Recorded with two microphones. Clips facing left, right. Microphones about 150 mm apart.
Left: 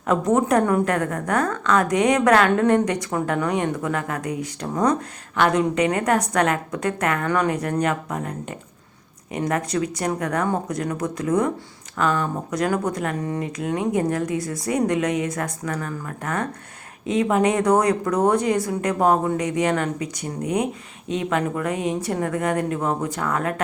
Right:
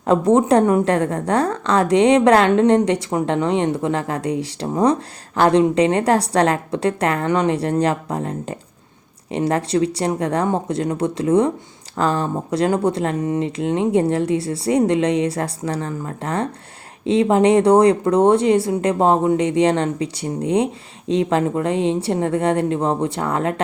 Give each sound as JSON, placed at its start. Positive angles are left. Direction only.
{"t": 0.0, "sound": "a woman's voice", "side_deg": -30}